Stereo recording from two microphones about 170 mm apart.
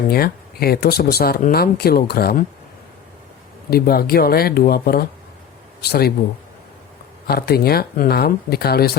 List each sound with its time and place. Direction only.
0.1 s speech: 65° left (ahead or behind)
3.7 s speech: 65° left (ahead or behind)
7.3 s speech: 65° left (ahead or behind)